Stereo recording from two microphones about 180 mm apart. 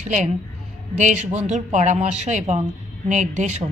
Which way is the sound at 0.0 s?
40° right (ahead or behind).